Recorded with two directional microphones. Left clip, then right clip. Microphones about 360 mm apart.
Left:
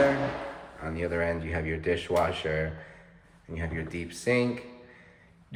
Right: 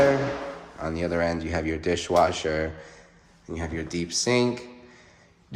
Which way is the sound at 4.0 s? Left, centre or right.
Centre.